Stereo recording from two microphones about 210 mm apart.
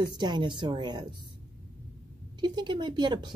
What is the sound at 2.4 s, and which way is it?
Speech, 20° right (ahead or behind).